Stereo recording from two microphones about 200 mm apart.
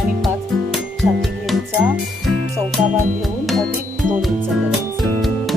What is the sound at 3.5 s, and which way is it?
Music, centre (ahead or behind).